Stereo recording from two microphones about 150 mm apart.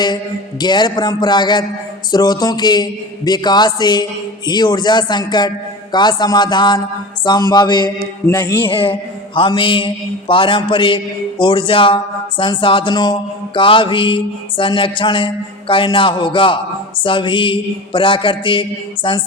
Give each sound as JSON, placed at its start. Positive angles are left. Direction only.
{"t": 0.6, "sound": "a man's voice", "side_deg": 30}
{"t": 8.6, "sound": "mantra", "side_deg": 35}